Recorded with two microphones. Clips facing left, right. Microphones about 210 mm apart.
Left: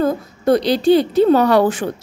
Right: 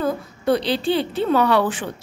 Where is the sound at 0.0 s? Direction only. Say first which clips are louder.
Left 5 dB; 45° left (ahead or behind).